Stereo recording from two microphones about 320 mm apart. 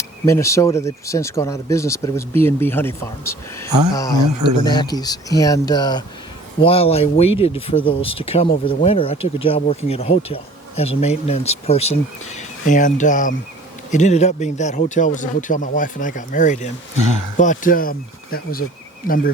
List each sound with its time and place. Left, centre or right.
0.3 s speech: centre
3.7 s speech: right
3.9 s speech: centre
4.2 s speech: right
4.7 s speech: centre